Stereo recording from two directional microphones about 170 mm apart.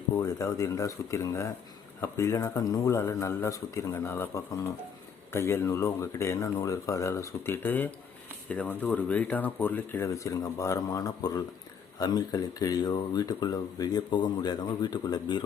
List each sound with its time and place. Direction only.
0.2 s speech: 20° left (ahead or behind)